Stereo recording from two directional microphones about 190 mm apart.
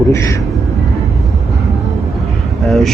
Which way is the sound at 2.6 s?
Centre (ahead or behind).